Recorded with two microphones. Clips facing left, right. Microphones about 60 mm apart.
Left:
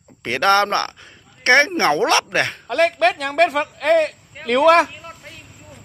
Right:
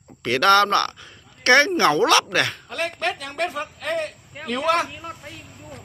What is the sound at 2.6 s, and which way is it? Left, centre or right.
A woman's voice, left.